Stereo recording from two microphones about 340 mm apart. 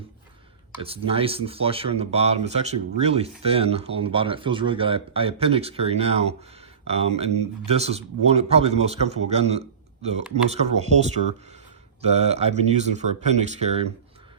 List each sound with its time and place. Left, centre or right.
0.8 s speech: centre